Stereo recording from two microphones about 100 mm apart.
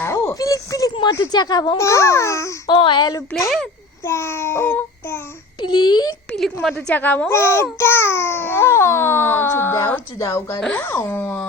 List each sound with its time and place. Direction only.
0.0 s a sound: 25° left (ahead or behind)
0.3 s a child's voice: 35° left (ahead or behind)
1.3 s a child's voice: 45° left (ahead or behind)
2.6 s a child's voice: 55° left (ahead or behind)
4.0 s a child's voice: 25° left (ahead or behind)
5.5 s a child's voice: 45° left (ahead or behind)
6.3 s a woman's voice: centre (ahead or behind)
6.8 s a child's voice: 15° left (ahead or behind)